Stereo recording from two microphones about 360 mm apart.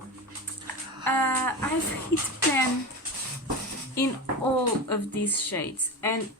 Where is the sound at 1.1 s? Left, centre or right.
Centre.